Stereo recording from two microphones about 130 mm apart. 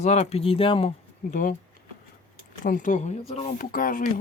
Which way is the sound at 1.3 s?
90° left.